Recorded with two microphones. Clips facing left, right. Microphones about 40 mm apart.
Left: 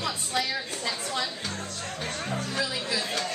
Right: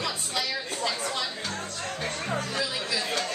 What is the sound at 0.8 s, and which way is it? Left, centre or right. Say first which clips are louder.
Speech: right 4 dB; right.